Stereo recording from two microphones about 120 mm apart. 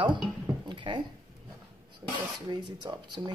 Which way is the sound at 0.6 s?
40° right (ahead or behind).